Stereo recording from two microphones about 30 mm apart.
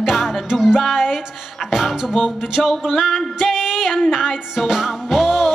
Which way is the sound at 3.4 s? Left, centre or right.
Centre.